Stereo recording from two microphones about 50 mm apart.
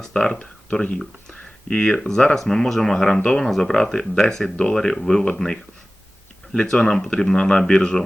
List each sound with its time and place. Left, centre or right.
0.0 s speech: centre
6.5 s speech: centre